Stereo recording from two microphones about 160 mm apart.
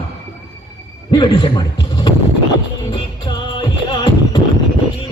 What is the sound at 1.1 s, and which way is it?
Speech, 30° left (ahead or behind).